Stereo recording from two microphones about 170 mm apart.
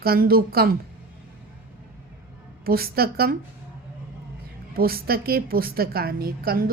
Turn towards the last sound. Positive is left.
turn(degrees=-60)  # may be behind; listen again after turning